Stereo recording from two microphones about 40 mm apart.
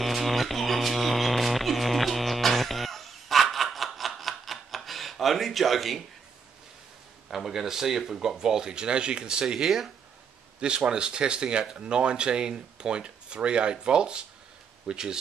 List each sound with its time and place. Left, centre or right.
0.0 s music: centre
3.5 s a sound: centre
7.2 s speech: centre
10.9 s speech: right